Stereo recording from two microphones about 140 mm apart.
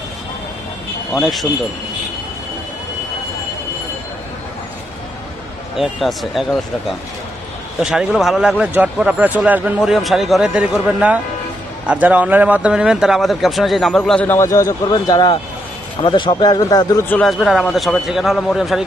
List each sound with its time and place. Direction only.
1.1 s a man's voice: centre (ahead or behind)
5.8 s a man's voice: centre (ahead or behind); by 17.0 s 25° left (ahead or behind)
17.1 s a man's voice: 5° left (ahead or behind)